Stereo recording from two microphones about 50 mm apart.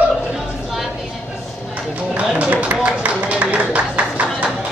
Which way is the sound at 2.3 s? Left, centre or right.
Right.